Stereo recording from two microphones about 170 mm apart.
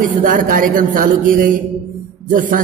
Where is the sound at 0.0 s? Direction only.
50° right (ahead or behind).